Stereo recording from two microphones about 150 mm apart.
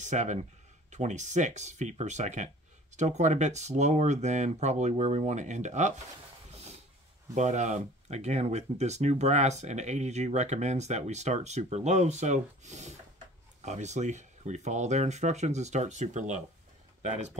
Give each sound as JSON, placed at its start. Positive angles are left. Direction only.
{"t": 0.0, "sound": "speech", "side_deg": -55}
{"t": 7.3, "sound": "speech", "side_deg": -50}